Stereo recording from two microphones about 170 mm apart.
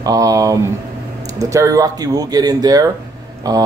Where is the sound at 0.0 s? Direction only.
20° right (ahead or behind).